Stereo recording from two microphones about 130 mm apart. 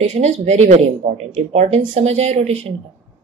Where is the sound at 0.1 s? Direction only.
60° right (ahead or behind).